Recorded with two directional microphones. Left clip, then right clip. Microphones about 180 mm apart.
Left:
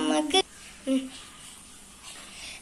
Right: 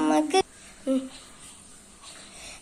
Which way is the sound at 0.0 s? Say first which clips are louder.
Right 2 dB; 55° right (ahead or behind).